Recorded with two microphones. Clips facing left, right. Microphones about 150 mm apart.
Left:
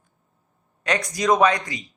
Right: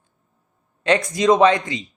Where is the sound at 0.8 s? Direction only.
25° right (ahead or behind).